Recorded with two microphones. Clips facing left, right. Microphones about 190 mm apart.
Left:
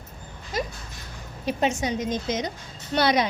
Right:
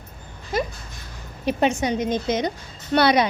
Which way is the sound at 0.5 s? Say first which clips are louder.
Right 5 dB; 55° right (ahead or behind).